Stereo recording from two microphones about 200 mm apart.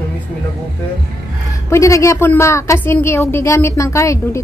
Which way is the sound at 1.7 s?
15° left (ahead or behind).